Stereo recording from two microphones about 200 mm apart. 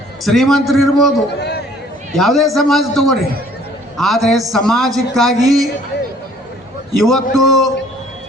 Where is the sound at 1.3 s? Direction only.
55° left (ahead or behind).